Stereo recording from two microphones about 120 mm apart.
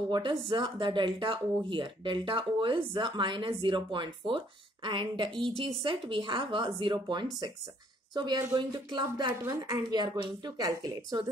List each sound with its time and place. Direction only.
0.1 s a woman's voice: 45° right (ahead or behind)